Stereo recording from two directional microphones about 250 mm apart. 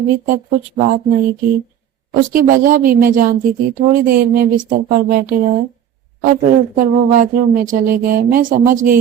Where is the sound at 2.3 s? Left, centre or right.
Right.